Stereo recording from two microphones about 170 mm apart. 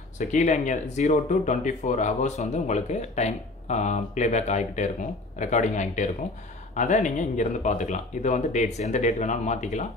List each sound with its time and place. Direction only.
0.2 s speech: 45° left (ahead or behind)